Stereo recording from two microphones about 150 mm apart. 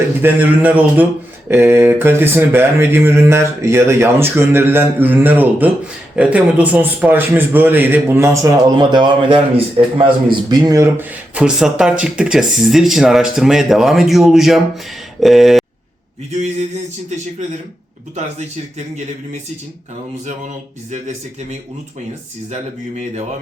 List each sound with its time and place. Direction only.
0.2 s speech: 10° right (ahead or behind); by 10.1 s 35° right (ahead or behind)
10.5 s speech: 20° right (ahead or behind); by 14.6 s centre (ahead or behind)
15.2 s a sound: centre (ahead or behind)